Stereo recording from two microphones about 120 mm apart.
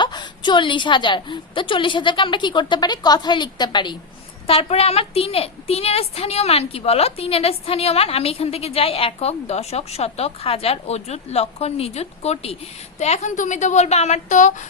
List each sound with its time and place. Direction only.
0.0 s a woman's voice: 40° left (ahead or behind)
4.4 s a woman's voice: 55° left (ahead or behind); by 14.5 s 90° left